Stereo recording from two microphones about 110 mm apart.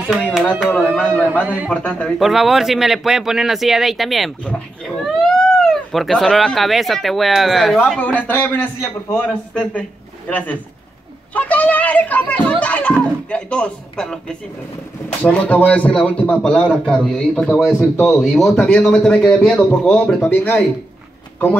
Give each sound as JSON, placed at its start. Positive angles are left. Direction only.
{"t": 0.1, "sound": "speech", "side_deg": -5}
{"t": 0.7, "sound": "a child's voice", "side_deg": 10}
{"t": 1.4, "sound": "a man's voice", "side_deg": -15}
{"t": 1.7, "sound": "a child's voice", "side_deg": 10}
{"t": 2.1, "sound": "speech", "side_deg": 0}
{"t": 8.0, "sound": "a child's voice", "side_deg": 15}
{"t": 15.2, "sound": "a child's voice", "side_deg": 10}
{"t": 20.2, "sound": "a child's voice", "side_deg": 15}